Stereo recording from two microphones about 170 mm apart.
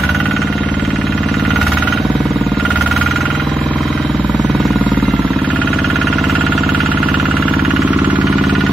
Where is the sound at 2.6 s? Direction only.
5° left (ahead or behind).